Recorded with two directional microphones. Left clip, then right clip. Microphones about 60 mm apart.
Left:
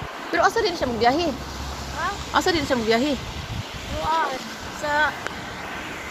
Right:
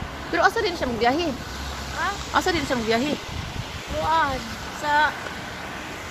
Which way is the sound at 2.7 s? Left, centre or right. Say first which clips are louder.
Left 2 dB; left.